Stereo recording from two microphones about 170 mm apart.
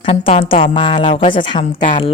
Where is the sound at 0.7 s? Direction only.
30° left (ahead or behind).